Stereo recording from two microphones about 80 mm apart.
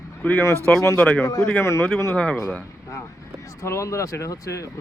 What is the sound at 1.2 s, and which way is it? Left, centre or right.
Speech, left.